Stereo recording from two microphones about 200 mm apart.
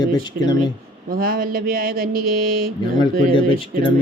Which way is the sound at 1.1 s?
45° right (ahead or behind).